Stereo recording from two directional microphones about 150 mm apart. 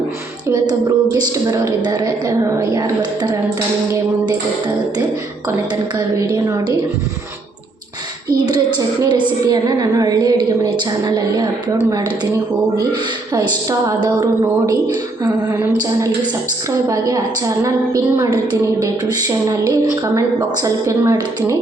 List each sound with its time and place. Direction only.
0.5 s a woman's voice: 25° right (ahead or behind)
8.4 s a woman's voice: 30° right (ahead or behind)
16.9 s a woman's voice: 20° right (ahead or behind)